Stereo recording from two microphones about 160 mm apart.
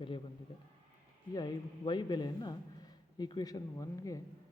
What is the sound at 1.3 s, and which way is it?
Speech, 25° left (ahead or behind).